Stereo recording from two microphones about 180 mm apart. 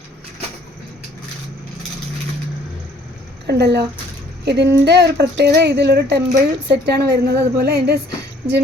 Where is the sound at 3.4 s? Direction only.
70° right (ahead or behind).